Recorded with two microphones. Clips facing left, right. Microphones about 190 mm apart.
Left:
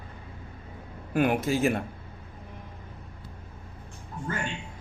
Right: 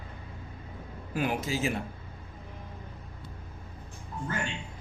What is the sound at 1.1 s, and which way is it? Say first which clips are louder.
Speech: left 6 dB; 60° left (ahead or behind).